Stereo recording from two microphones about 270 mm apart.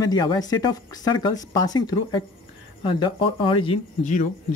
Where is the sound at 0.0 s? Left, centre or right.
Centre.